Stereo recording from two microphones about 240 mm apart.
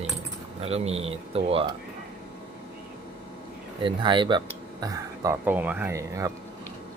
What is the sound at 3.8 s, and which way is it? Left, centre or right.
Speech, centre.